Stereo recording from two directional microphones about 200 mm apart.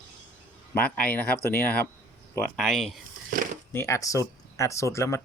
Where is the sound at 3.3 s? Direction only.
45° right (ahead or behind).